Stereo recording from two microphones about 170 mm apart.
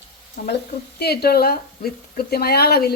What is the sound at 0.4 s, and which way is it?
Speech, 50° left (ahead or behind).